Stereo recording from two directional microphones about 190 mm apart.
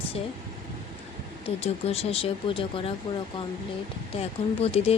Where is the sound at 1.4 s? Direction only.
30° left (ahead or behind).